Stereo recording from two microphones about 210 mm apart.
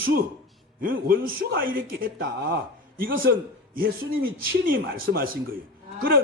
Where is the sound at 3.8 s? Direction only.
45° right (ahead or behind).